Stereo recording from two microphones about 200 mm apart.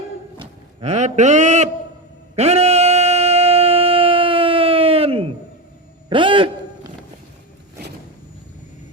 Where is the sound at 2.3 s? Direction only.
30° right (ahead or behind).